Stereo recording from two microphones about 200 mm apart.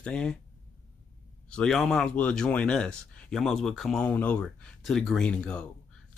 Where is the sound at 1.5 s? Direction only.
5° left (ahead or behind).